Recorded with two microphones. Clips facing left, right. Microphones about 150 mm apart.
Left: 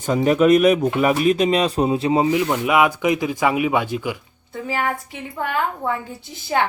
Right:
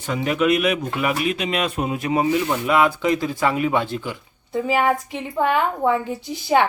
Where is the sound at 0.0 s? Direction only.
40° left (ahead or behind); by 2.4 s 25° left (ahead or behind).